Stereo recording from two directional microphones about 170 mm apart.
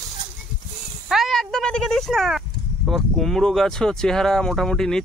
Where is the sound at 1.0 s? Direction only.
Centre (ahead or behind).